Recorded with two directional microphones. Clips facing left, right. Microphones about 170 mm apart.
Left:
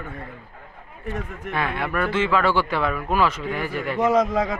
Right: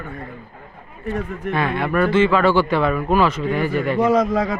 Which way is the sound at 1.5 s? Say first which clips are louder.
Right 5 dB; 10° left (ahead or behind).